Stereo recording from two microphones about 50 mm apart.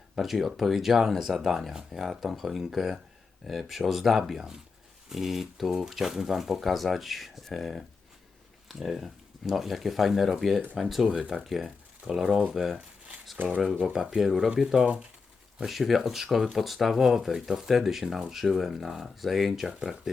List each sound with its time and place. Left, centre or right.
0.2 s speech: centre
13.4 s speech: right
13.9 s speech: centre